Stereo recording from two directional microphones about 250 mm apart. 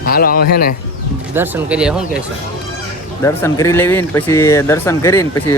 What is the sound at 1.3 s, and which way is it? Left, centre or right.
Speech, centre.